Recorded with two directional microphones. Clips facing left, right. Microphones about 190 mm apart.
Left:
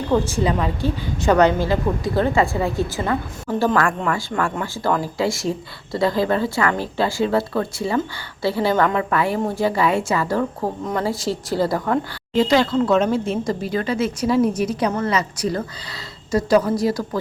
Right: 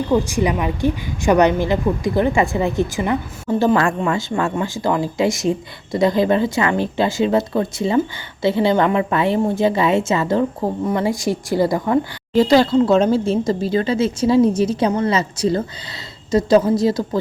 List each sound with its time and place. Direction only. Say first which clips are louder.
0.1 s a woman's voice: even; 15° right (ahead or behind)
12.3 s speech: right 4 dB; 35° right (ahead or behind)